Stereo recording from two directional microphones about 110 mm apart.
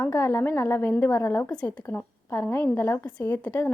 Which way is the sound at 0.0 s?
20° left (ahead or behind).